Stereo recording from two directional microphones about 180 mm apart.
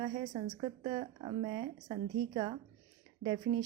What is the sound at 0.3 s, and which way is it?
A woman's voice, 25° right (ahead or behind).